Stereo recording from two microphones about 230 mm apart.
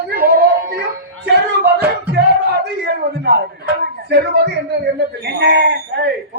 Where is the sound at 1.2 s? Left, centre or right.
Right.